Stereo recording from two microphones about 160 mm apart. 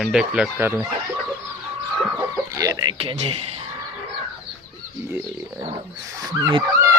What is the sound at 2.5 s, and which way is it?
Speech, 20° right (ahead or behind).